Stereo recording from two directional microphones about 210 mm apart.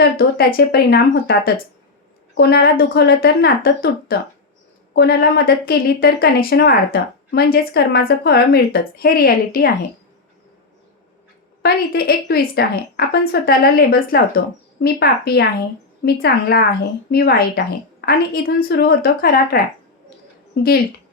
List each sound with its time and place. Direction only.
0.0 s speech: 45° left (ahead or behind)
11.6 s speech: 45° left (ahead or behind)